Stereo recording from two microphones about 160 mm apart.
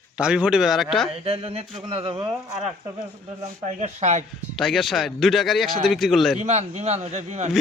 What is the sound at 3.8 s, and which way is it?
Speech, 45° right (ahead or behind).